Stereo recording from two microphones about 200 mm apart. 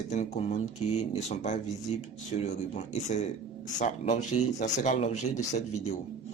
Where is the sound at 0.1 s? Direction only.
35° left (ahead or behind).